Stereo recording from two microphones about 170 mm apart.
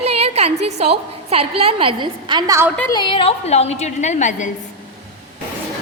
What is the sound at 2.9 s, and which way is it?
A woman's voice, 30° left (ahead or behind).